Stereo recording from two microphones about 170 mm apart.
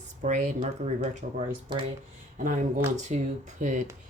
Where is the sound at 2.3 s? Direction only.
50° right (ahead or behind).